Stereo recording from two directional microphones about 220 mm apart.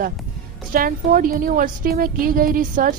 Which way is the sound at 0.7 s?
40° right (ahead or behind).